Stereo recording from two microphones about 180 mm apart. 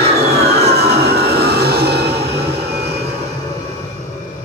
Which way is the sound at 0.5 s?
65° right (ahead or behind).